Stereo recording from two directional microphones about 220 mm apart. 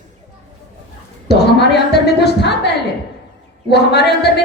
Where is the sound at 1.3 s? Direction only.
50° left (ahead or behind).